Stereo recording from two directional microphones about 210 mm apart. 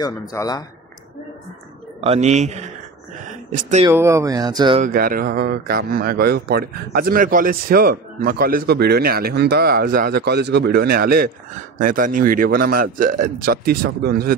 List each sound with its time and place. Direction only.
0.0 s a man's voice: 15° left (ahead or behind)
2.0 s a man's voice: 30° right (ahead or behind)
3.8 s speech: 15° right (ahead or behind)
4.7 s speech: 40° right (ahead or behind)